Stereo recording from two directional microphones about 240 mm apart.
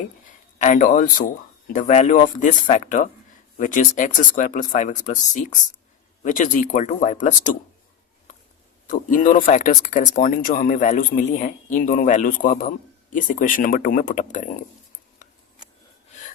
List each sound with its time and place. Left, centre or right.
0.6 s speech: left
8.9 s speech: left